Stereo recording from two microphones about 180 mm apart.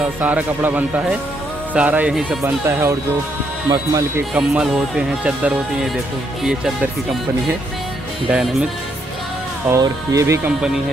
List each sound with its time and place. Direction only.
0.0 s speech: 10° right (ahead or behind)
4.3 s speech: 5° right (ahead or behind)
8.3 s speech: 5° right (ahead or behind)
9.7 s speech: 15° right (ahead or behind)